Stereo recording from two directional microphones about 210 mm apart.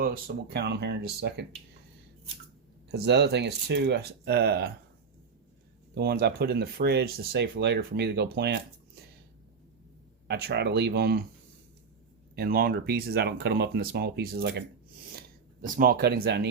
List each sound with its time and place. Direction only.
0.0 s speech: 45° right (ahead or behind)
2.9 s speech: 50° right (ahead or behind)
5.9 s speech: 50° right (ahead or behind)
10.2 s speech: 50° right (ahead or behind)
12.4 s speech: 45° right (ahead or behind)
15.6 s speech: 40° right (ahead or behind)